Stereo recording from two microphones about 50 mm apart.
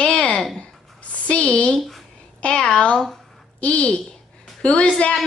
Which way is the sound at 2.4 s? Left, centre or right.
Centre.